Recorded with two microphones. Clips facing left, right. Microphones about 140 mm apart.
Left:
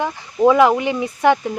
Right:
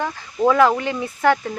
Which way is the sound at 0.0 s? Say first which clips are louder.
Left 4 dB; 15° left (ahead or behind).